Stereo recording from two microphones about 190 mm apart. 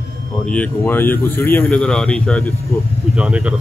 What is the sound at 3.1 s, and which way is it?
Speech, 5° right (ahead or behind).